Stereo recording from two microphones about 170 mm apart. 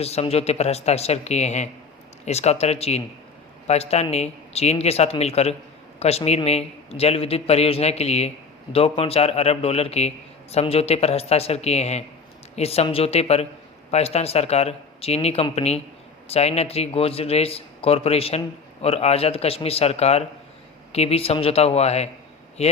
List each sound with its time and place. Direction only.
0.0 s a man's voice: 35° left (ahead or behind)